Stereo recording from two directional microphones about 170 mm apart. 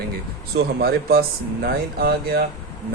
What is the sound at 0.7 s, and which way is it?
Speech, 65° right (ahead or behind).